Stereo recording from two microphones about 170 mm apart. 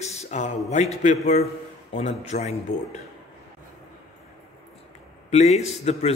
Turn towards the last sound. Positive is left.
turn(degrees=40)  # may be behind; listen again after turning